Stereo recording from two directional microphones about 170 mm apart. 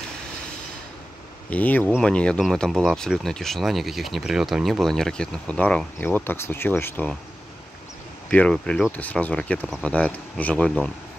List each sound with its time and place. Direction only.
1.5 s speech: 10° left (ahead or behind)
8.3 s speech: 5° left (ahead or behind)